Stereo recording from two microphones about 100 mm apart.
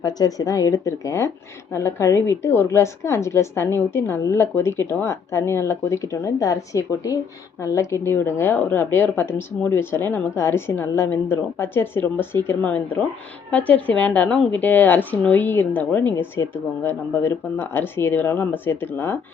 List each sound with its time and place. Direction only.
0.0 s a woman's voice: 40° left (ahead or behind); by 19.2 s 20° left (ahead or behind)